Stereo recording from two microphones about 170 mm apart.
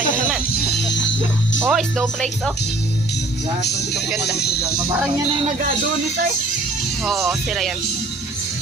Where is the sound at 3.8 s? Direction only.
80° left.